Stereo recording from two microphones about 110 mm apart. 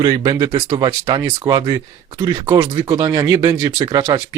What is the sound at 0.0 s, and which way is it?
Speech, 45° right (ahead or behind).